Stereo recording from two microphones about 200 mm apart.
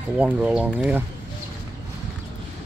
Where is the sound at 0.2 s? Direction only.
5° right (ahead or behind).